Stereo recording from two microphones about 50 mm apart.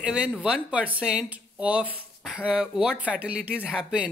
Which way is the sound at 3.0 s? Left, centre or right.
Right.